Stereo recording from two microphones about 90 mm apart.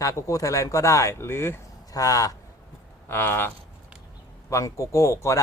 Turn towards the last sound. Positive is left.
turn(degrees=35)  # may be behind; listen again after turning